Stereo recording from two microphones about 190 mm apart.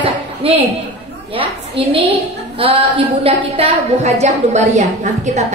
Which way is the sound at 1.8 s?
30° right (ahead or behind).